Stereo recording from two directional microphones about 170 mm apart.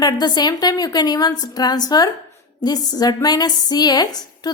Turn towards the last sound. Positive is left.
turn(degrees=25)  # may be behind; listen again after turning